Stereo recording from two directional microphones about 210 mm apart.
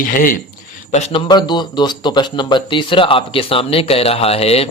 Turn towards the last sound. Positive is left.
turn(degrees=30)  # may be behind; listen again after turning